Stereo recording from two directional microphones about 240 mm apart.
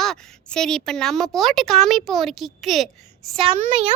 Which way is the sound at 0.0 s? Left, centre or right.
Centre.